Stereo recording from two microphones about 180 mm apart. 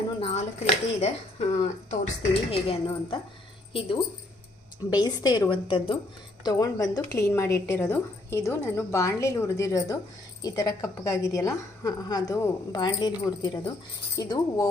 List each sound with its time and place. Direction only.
0.2 s a woman's voice: 35° left (ahead or behind)